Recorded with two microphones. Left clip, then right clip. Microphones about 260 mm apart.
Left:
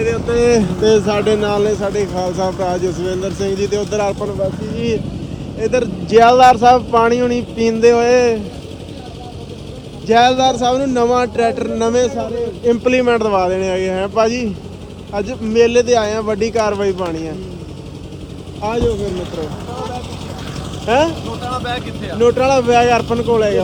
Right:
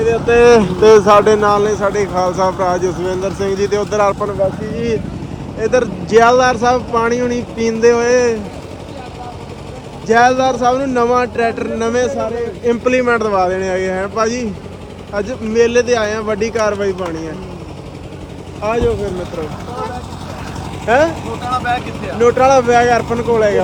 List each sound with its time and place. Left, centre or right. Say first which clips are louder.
0.8 s speech: right 6 dB; centre
1.2 s speech: right 4 dB; centre
1.5 s speech: right 3 dB; centre
10.1 s speech: even; centre
19.0 s speech: right 1 dB; centre
20.8 s speech: right 2 dB; centre